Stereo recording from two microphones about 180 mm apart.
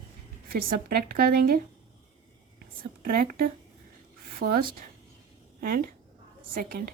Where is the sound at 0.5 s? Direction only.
55° right (ahead or behind).